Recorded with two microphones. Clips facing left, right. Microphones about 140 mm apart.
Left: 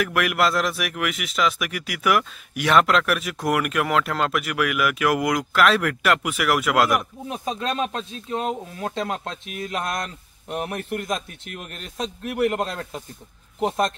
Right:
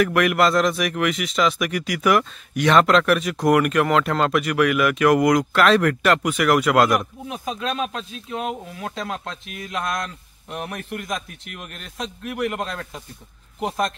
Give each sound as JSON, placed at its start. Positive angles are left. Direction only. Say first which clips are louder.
{"t": 0.0, "sound": "a man's voice", "louder": "right 4 dB", "side_deg": 5}
{"t": 7.9, "sound": "speech", "louder": "left 2 dB", "side_deg": 35}